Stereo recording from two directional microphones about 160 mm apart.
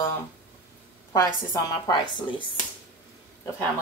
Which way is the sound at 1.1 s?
20° left (ahead or behind).